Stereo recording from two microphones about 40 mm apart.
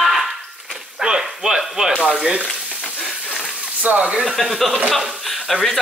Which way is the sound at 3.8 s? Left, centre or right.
Right.